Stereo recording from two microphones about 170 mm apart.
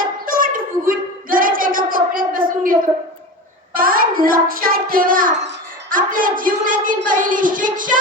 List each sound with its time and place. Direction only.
0.0 s a sound: 55° right (ahead or behind)
3.8 s child singing: 55° right (ahead or behind)
5.9 s a woman's voice: 55° right (ahead or behind)